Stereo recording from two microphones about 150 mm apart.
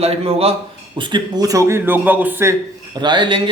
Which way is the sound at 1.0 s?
30° right (ahead or behind).